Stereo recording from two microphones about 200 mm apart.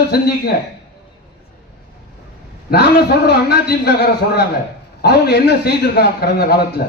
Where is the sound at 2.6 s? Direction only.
55° left (ahead or behind).